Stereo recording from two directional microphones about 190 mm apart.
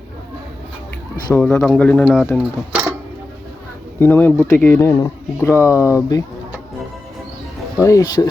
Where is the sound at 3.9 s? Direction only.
10° left (ahead or behind).